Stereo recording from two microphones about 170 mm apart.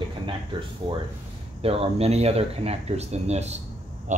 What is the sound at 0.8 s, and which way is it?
Speech, 30° right (ahead or behind).